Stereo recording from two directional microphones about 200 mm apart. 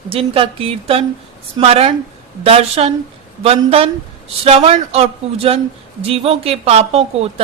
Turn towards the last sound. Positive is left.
turn(degrees=-30)  # may be behind; listen again after turning